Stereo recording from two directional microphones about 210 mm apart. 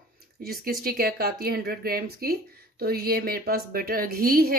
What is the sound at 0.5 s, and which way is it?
A woman's voice, 45° right (ahead or behind).